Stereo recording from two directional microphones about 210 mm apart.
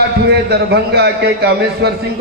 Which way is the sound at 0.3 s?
50° right (ahead or behind).